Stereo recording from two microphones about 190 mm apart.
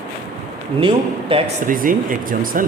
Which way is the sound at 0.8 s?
30° right (ahead or behind).